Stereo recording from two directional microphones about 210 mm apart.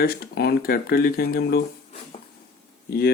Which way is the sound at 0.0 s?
50° left (ahead or behind).